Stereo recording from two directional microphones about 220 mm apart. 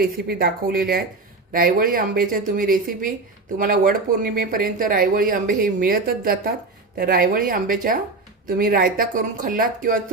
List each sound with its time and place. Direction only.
0.0 s a woman's voice: 40° right (ahead or behind)